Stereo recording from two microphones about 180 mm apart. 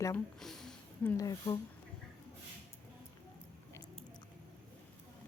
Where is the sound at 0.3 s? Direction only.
Centre (ahead or behind).